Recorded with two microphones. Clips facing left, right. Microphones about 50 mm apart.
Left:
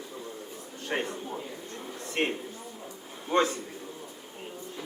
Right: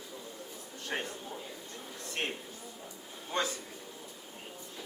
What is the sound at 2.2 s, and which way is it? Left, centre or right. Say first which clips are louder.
Speech: left 7 dB; left.